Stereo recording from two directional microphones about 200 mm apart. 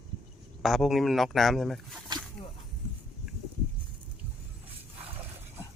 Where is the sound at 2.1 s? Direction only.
20° right (ahead or behind).